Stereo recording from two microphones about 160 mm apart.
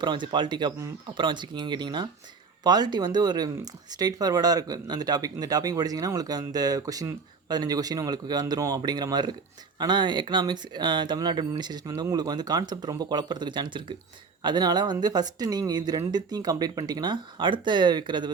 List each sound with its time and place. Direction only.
0.0 s speech: 30° right (ahead or behind)